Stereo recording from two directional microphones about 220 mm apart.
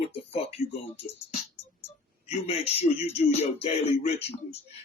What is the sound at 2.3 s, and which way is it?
Speech, 30° left (ahead or behind).